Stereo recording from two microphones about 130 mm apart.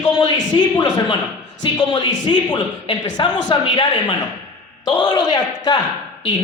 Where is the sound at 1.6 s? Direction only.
35° left (ahead or behind).